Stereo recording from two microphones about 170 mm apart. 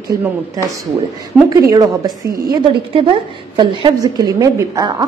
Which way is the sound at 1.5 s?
20° right (ahead or behind).